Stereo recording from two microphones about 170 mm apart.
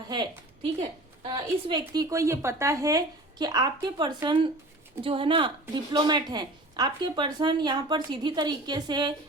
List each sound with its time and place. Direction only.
0.1 s a woman's voice: 25° right (ahead or behind)
2.0 s a woman's voice: 20° right (ahead or behind)